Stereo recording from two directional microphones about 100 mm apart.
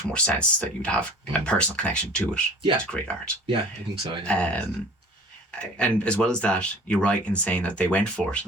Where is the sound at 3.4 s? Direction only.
55° right (ahead or behind).